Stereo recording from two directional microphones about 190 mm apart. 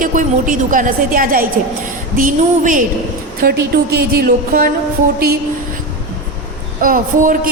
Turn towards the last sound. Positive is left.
turn(degrees=-45)  # may be behind; listen again after turning